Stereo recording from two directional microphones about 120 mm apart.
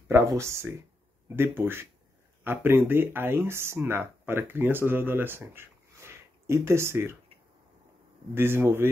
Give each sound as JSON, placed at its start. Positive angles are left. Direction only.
{"t": 0.1, "sound": "speech", "side_deg": -25}
{"t": 8.4, "sound": "speech", "side_deg": -20}